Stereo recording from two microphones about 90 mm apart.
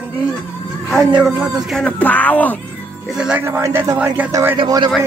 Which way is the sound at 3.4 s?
25° right (ahead or behind).